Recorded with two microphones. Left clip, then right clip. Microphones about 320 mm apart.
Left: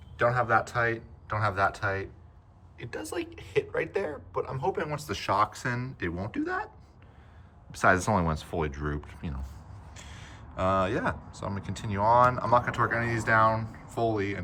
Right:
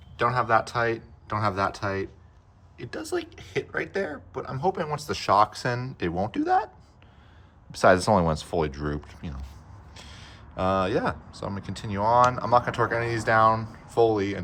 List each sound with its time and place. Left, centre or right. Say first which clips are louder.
0.2 s speech: right 2 dB; centre
7.7 s speech: right 5 dB; centre